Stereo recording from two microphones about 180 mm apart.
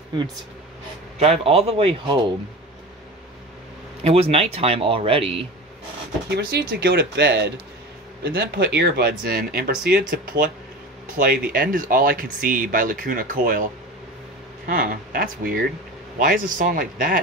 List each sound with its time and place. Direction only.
1.2 s speech: 35° right (ahead or behind)
4.0 s speech: 35° right (ahead or behind)
6.2 s speech: 65° right (ahead or behind)
14.7 s speech: 50° right (ahead or behind)